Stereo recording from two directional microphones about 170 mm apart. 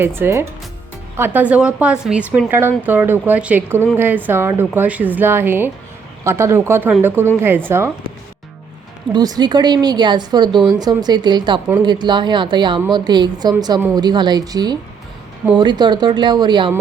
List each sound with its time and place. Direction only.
0.0 s a woman's voice: 15° right (ahead or behind)
9.1 s a woman's voice: 25° right (ahead or behind)